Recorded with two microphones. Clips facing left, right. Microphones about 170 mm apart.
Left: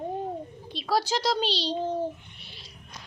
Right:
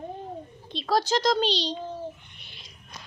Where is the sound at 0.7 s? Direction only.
10° left (ahead or behind).